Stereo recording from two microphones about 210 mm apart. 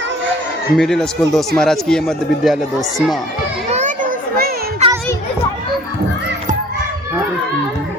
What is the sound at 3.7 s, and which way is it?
Children playing, 35° right (ahead or behind).